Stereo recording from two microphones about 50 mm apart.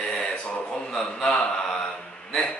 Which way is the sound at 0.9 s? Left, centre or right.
Centre.